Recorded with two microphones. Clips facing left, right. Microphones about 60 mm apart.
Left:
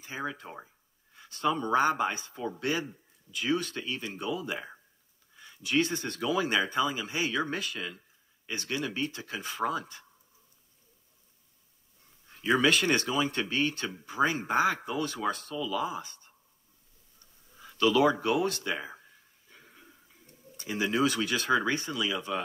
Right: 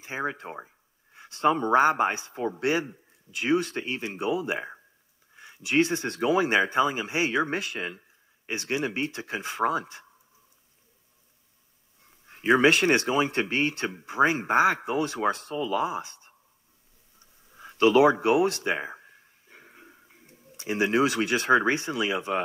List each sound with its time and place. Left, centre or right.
0.0 s speech: right
12.3 s speech: right
17.6 s a sound: right
21.7 s speech: right